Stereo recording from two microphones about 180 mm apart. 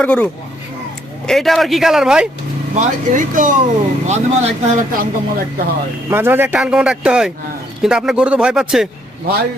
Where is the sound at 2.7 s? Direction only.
45° right (ahead or behind).